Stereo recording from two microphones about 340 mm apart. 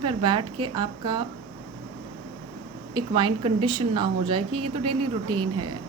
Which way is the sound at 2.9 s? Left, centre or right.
Centre.